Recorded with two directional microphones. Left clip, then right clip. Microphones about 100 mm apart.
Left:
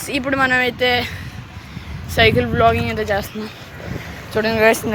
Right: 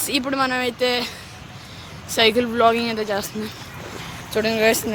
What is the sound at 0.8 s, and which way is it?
Speech, 15° left (ahead or behind).